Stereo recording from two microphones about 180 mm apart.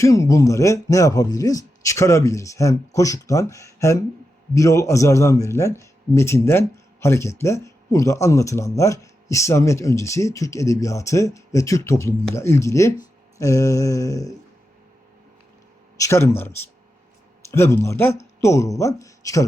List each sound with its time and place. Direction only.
0.0 s a man's voice: 20° left (ahead or behind)
16.0 s a man's voice: 15° left (ahead or behind)
17.5 s a man's voice: 15° left (ahead or behind)